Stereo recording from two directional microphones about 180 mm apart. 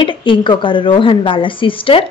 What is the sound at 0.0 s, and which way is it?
A woman's voice, 30° left (ahead or behind).